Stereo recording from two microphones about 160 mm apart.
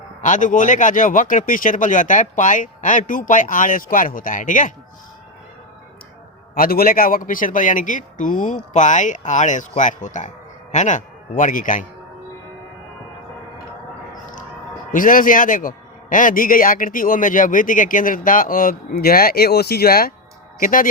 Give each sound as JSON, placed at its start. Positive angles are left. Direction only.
{"t": 0.2, "sound": "a man's voice", "side_deg": 50}
{"t": 6.5, "sound": "a man's voice", "side_deg": 65}
{"t": 14.9, "sound": "a man's voice", "side_deg": 55}
{"t": 20.6, "sound": "speech", "side_deg": 60}